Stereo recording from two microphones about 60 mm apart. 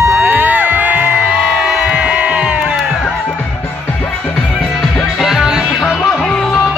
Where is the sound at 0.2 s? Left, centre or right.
Right.